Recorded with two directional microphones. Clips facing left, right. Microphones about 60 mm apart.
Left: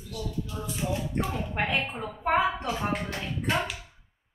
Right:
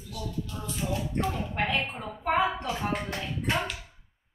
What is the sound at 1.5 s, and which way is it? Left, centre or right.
A woman's voice, centre.